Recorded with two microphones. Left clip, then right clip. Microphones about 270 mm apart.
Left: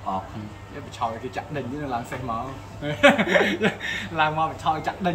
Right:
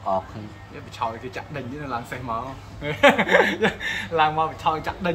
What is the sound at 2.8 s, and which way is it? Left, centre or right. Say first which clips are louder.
Speech: right 1 dB; centre.